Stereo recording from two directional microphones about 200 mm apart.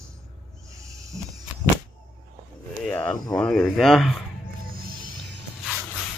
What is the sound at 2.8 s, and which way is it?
Speech, 5° left (ahead or behind).